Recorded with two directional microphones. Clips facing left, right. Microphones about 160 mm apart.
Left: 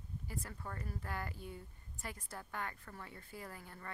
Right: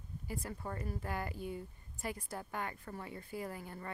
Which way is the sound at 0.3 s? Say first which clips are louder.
Right 5 dB; 15° right (ahead or behind).